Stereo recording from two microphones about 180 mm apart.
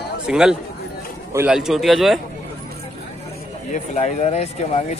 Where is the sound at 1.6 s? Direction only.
Centre (ahead or behind).